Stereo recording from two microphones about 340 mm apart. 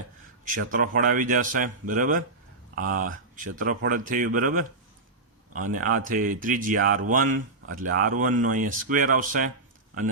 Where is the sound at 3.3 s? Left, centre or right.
Right.